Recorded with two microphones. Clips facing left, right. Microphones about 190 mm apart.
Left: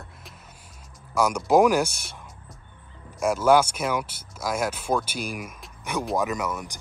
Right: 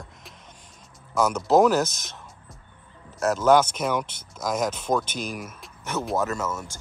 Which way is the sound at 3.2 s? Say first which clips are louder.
Even; 10° left (ahead or behind).